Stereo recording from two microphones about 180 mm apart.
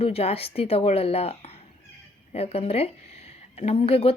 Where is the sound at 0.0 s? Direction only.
35° left (ahead or behind).